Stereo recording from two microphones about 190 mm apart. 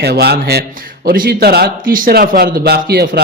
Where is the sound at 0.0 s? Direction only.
60° right (ahead or behind).